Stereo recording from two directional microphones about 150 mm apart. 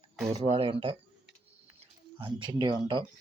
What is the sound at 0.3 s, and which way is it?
Speech, 40° right (ahead or behind).